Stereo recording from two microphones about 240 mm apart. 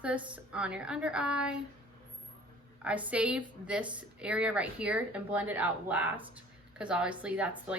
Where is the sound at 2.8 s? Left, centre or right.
Centre.